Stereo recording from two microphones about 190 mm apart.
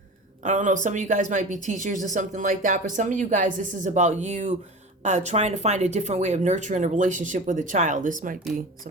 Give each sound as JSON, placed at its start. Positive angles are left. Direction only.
{"t": 0.4, "sound": "speech", "side_deg": -40}